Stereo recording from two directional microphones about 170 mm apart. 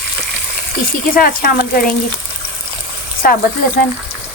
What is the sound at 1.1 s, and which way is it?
Speech, 60° left (ahead or behind).